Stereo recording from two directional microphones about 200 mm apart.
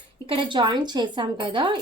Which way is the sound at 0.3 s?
25° right (ahead or behind).